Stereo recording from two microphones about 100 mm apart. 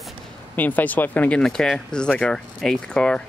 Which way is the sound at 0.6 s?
15° left (ahead or behind).